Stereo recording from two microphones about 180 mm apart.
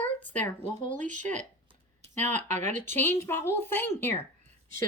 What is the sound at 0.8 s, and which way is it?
Speech, 45° right (ahead or behind).